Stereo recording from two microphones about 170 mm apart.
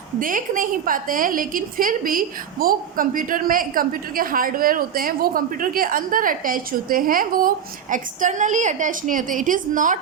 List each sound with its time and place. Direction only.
0.2 s a woman's voice: 50° right (ahead or behind)